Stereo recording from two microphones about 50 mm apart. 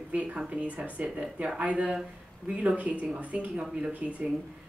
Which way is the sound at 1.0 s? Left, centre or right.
Right.